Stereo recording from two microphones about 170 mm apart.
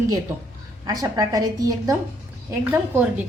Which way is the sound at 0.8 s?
20° right (ahead or behind).